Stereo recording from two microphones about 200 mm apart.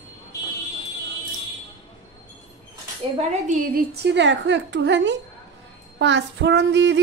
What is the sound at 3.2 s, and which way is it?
A woman's voice, 40° right (ahead or behind).